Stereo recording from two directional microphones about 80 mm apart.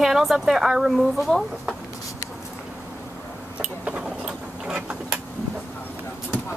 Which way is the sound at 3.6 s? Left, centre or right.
Centre.